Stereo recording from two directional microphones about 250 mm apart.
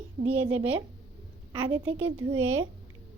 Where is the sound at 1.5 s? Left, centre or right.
Centre.